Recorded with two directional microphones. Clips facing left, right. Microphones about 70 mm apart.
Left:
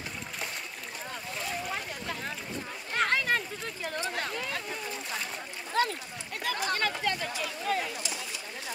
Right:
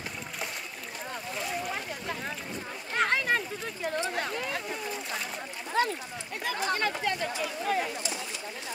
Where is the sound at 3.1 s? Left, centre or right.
Centre.